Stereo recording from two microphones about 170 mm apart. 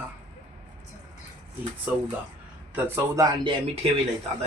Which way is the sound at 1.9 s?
10° right (ahead or behind).